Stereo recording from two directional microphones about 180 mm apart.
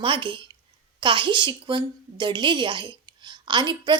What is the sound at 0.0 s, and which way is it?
A woman's voice, 25° right (ahead or behind).